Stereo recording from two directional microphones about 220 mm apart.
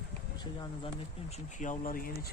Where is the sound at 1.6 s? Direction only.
35° left (ahead or behind).